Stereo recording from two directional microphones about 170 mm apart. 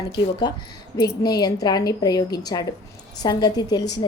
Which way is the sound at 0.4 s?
25° left (ahead or behind).